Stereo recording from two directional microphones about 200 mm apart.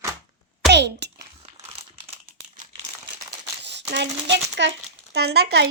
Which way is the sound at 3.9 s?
60° right (ahead or behind).